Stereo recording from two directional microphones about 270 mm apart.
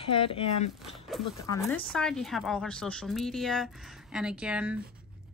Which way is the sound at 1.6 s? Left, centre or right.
Centre.